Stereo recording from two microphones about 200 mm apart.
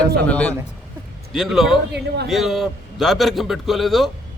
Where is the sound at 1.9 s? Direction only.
55° right (ahead or behind).